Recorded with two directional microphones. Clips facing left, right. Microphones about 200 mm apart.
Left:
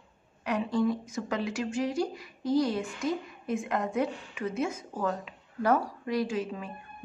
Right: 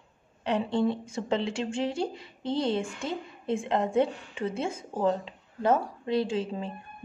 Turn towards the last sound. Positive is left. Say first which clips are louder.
# right 2 dB
turn(degrees=-30)  # may be behind; listen again after turning